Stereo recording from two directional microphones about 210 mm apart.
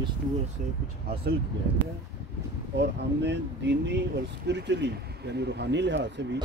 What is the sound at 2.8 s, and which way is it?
Speech, 55° right (ahead or behind).